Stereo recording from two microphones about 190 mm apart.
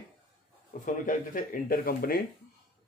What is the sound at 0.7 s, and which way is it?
Speech, 45° left (ahead or behind).